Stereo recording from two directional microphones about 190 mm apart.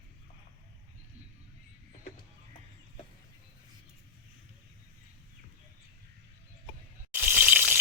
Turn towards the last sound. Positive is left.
turn(degrees=-10)  # may be behind; listen again after turning